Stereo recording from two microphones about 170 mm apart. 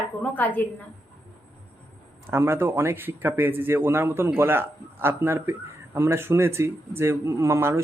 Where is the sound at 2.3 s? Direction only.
15° right (ahead or behind).